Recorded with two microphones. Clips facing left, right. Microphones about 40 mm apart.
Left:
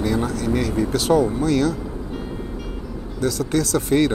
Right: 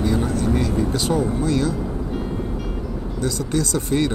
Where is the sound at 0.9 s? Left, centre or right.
Left.